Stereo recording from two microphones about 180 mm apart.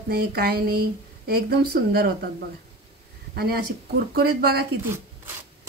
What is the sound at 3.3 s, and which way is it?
Speech, 60° right (ahead or behind).